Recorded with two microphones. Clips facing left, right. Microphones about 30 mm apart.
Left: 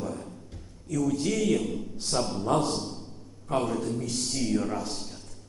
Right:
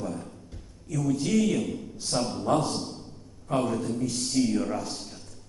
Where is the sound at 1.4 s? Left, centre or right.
Centre.